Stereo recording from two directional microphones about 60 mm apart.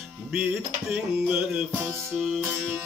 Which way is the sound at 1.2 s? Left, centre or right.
Right.